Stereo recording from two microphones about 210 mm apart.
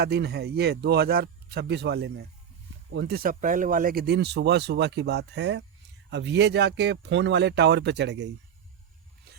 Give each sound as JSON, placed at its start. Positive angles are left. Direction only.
{"t": 0.0, "sound": "speech", "side_deg": -50}